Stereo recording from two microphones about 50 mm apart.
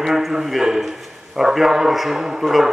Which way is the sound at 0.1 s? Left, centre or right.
Centre.